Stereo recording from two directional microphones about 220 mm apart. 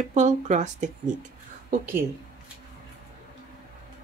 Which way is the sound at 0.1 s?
35° right (ahead or behind).